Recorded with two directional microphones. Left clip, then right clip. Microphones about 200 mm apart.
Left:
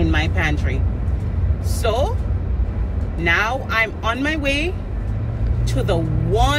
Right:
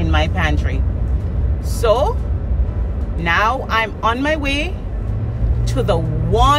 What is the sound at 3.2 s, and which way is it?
Speech, 20° right (ahead or behind).